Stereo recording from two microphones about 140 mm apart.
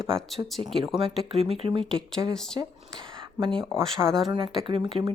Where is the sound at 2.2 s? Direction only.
25° right (ahead or behind).